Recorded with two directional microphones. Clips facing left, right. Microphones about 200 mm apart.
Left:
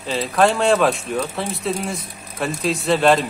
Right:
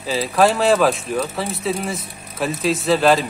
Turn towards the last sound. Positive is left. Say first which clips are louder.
# even
turn(degrees=0)  # may be behind; listen again after turning